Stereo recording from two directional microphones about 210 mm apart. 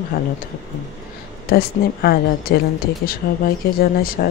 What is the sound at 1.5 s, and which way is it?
Speech, 45° left (ahead or behind).